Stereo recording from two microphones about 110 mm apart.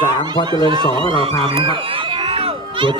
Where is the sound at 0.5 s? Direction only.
45° right (ahead or behind).